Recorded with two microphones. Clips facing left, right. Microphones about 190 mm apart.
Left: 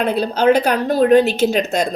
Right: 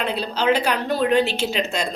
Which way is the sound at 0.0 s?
45° left (ahead or behind).